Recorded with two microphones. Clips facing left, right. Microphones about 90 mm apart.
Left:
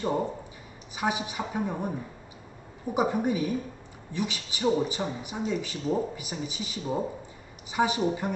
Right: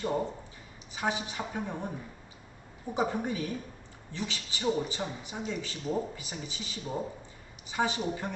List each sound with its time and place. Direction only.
0.0 s speech: 15° left (ahead or behind)